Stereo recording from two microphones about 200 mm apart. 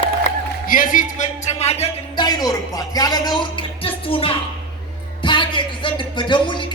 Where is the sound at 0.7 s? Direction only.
45° left (ahead or behind).